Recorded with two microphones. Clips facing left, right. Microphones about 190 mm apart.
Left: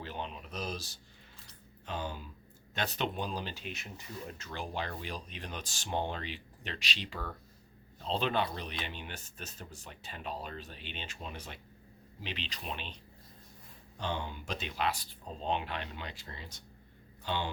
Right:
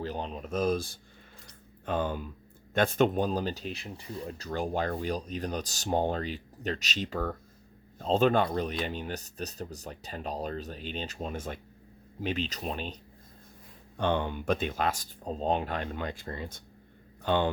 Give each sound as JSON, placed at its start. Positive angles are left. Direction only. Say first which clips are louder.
{"t": 0.0, "sound": "speech", "louder": "right 6 dB", "side_deg": -40}
{"t": 13.9, "sound": "speech", "louder": "right 9 dB", "side_deg": -60}